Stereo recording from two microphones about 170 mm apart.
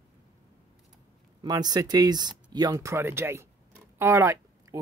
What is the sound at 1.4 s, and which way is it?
Speech, 25° right (ahead or behind).